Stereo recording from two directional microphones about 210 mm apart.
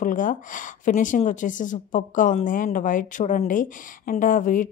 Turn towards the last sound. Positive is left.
turn(degrees=40)  # may be behind; listen again after turning